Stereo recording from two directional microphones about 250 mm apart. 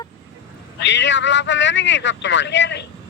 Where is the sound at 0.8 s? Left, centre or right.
Left.